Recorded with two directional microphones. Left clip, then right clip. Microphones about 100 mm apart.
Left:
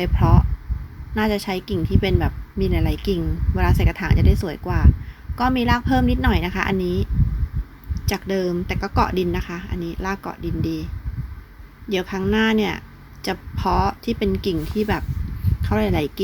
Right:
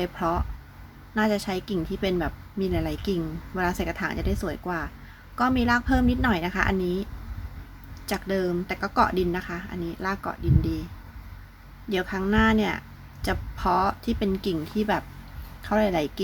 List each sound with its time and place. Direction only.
0.0 s speech: 15° left (ahead or behind)
11.9 s speech: 15° left (ahead or behind)